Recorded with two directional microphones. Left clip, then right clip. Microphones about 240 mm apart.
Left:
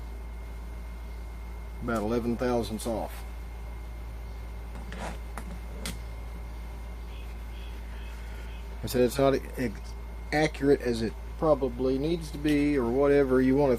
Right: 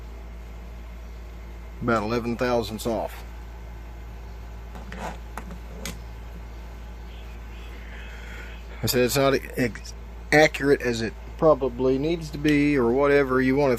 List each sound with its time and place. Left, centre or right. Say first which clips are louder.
1.9 s speech: right 5 dB; right
4.9 s a sound: right 4 dB; right
8.8 s speech: right 3 dB; right